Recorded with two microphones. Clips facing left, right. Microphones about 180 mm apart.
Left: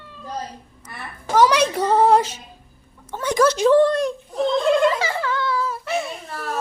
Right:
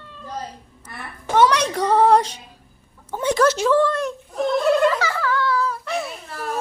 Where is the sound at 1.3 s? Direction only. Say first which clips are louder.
Left 1 dB; 5° left (ahead or behind).